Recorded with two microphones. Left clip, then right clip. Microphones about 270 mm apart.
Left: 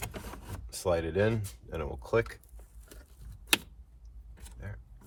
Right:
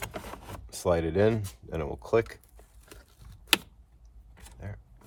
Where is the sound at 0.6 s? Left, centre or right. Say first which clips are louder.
Right 3 dB; right.